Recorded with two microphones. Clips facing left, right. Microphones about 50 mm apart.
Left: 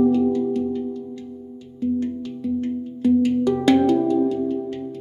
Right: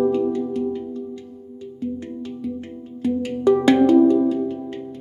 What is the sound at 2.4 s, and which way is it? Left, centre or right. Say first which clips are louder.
Music: left 6 dB; centre.